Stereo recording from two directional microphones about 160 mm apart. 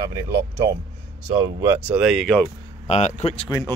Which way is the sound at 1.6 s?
15° right (ahead or behind).